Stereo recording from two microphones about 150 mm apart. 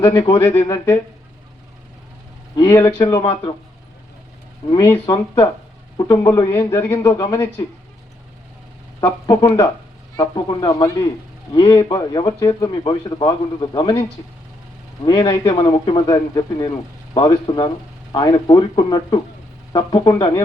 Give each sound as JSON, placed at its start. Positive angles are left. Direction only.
{"t": 0.0, "sound": "speech", "side_deg": 35}
{"t": 2.6, "sound": "a man's voice", "side_deg": 15}
{"t": 4.7, "sound": "a man's voice", "side_deg": 20}
{"t": 9.0, "sound": "speech", "side_deg": 20}
{"t": 15.0, "sound": "speech", "side_deg": 25}